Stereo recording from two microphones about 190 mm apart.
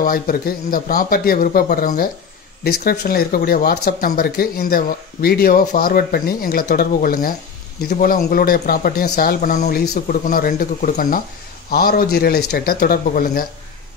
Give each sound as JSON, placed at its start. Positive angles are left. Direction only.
{"t": 0.0, "sound": "speech", "side_deg": 50}